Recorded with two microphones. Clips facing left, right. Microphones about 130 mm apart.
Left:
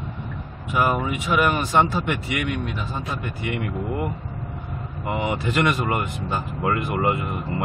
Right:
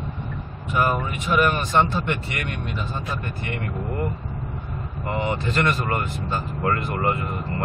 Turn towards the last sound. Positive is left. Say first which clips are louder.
# left 1 dB
turn(degrees=15)  # may be behind; listen again after turning